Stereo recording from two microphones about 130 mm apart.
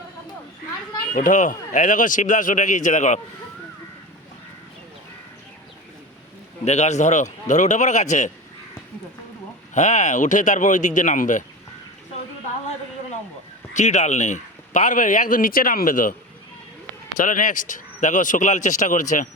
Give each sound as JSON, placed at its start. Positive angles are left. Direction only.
{"t": 1.1, "sound": "speech", "side_deg": 80}
{"t": 6.7, "sound": "speech", "side_deg": 60}
{"t": 9.7, "sound": "speech", "side_deg": 65}
{"t": 13.7, "sound": "speech", "side_deg": 65}
{"t": 17.2, "sound": "speech", "side_deg": 85}